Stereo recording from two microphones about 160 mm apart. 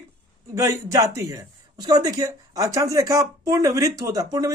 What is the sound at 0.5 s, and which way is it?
Speech, 20° right (ahead or behind).